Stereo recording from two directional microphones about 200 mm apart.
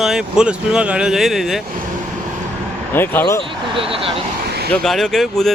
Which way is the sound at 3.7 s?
25° right (ahead or behind).